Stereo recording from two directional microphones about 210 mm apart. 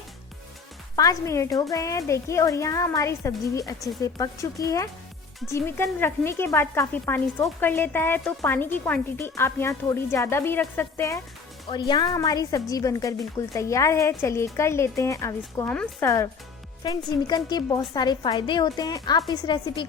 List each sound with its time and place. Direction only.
0.9 s a woman's voice: 15° left (ahead or behind)